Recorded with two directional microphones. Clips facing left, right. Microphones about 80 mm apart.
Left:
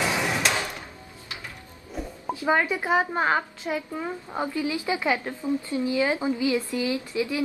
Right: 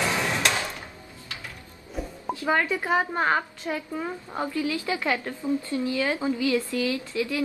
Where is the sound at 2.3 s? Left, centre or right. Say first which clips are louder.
Left 1 dB; centre.